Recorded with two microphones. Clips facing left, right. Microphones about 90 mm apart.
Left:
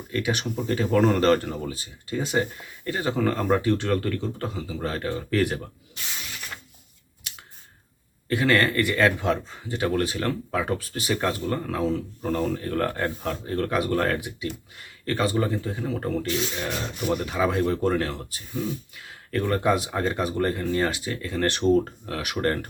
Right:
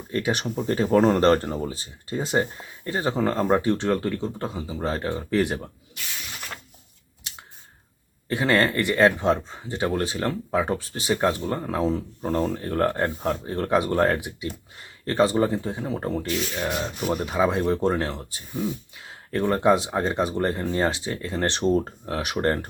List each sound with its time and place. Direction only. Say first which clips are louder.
0.1 s speech: right 2 dB; 35° right (ahead or behind)
8.3 s speech: even; 25° right (ahead or behind)
17.2 s speech: right 3 dB; 25° right (ahead or behind)